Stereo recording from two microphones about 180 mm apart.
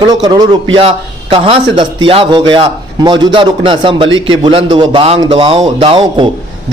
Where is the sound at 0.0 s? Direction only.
25° right (ahead or behind).